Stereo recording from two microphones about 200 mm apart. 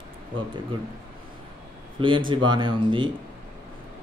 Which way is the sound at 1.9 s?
25° right (ahead or behind).